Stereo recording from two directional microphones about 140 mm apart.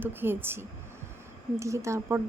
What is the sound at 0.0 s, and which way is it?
A woman's voice, 15° right (ahead or behind).